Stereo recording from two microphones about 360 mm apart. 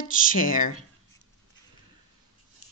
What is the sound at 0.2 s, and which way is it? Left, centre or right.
Speech, left.